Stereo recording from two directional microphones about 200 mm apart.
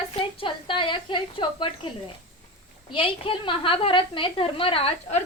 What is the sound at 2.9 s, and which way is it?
A woman's voice, 25° left (ahead or behind).